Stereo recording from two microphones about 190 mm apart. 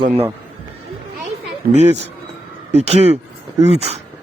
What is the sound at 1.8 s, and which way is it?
A man's voice, 35° right (ahead or behind).